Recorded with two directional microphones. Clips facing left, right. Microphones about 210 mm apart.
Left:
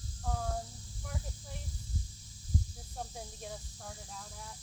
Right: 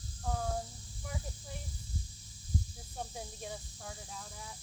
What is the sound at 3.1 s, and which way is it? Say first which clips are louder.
Speech: right 1 dB; 5° right (ahead or behind).